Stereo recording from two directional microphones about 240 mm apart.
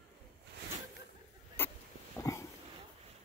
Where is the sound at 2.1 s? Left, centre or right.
Centre.